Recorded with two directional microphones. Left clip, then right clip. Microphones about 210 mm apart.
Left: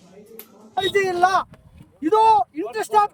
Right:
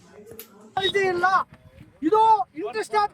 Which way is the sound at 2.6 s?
35° left (ahead or behind).